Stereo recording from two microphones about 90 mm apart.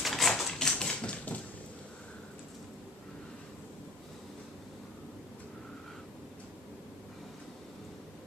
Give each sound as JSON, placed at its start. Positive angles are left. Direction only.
{"t": 0.0, "sound": "typewriter", "side_deg": 0}